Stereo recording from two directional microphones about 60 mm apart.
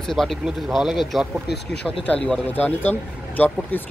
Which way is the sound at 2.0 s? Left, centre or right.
Left.